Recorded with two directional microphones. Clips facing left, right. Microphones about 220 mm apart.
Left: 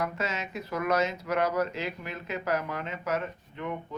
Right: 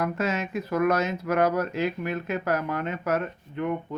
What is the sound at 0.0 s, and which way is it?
Speech, 55° right (ahead or behind).